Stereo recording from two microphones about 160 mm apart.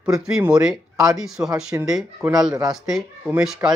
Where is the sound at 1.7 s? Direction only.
20° right (ahead or behind).